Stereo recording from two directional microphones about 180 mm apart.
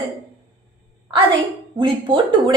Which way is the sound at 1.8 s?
25° right (ahead or behind).